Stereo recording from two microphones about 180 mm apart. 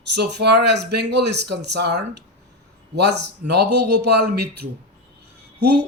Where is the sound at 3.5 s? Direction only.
65° right (ahead or behind).